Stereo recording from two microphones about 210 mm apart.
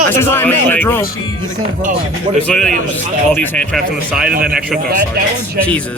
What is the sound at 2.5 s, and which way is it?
Speech, centre (ahead or behind).